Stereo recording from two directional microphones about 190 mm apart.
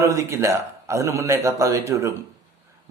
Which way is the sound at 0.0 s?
15° right (ahead or behind).